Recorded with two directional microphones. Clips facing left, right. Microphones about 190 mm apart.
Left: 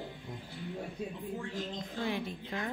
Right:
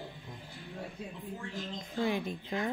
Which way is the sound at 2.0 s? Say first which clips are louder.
Right 4 dB; 15° right (ahead or behind).